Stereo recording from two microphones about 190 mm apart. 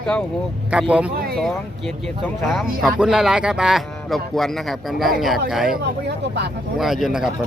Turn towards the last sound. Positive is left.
turn(degrees=0)  # may be behind; listen again after turning